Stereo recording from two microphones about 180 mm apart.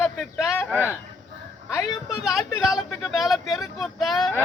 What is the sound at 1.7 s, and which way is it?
Speech, 20° left (ahead or behind).